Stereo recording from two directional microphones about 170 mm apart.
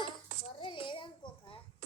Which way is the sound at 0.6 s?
30° left (ahead or behind).